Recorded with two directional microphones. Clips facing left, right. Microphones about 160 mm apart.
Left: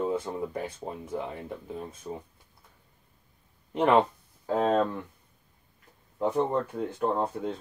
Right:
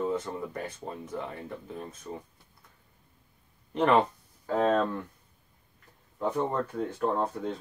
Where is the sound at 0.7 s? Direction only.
25° left (ahead or behind).